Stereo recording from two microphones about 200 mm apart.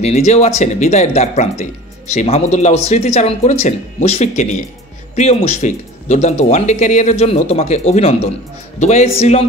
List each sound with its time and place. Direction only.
0.0 s speech: 35° left (ahead or behind)